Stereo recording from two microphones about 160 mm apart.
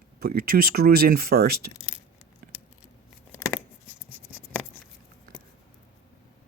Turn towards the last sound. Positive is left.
turn(degrees=10)  # may be behind; listen again after turning